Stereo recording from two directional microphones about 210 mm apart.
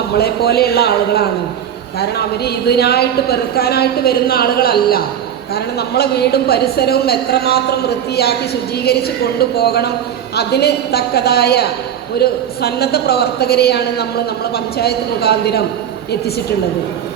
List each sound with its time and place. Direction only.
0.2 s a woman's voice: 50° left (ahead or behind)